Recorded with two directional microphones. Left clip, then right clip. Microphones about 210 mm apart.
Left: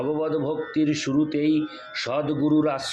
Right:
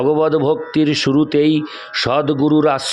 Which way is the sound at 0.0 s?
55° right (ahead or behind).